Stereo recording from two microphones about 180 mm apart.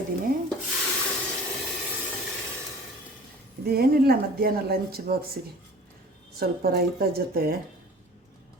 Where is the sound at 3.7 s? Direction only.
60° right (ahead or behind).